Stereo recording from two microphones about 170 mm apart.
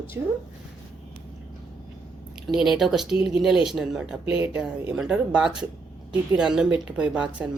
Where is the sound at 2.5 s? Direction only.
5° right (ahead or behind).